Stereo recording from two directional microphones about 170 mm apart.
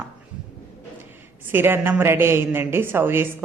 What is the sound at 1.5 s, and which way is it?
Speech, 15° right (ahead or behind).